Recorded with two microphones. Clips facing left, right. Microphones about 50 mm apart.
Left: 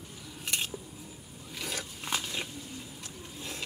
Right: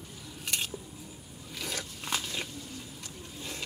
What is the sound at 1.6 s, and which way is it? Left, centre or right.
Crunch, centre.